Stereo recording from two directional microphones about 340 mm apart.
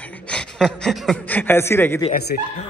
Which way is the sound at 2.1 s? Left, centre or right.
Left.